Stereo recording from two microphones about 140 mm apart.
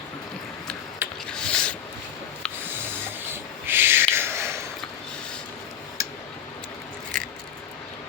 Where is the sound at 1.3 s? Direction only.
5° left (ahead or behind).